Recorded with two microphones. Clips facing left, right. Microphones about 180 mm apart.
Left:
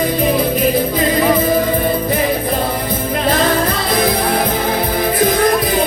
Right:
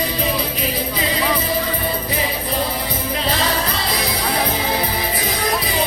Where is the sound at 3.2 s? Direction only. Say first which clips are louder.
Left 8 dB; 50° left (ahead or behind).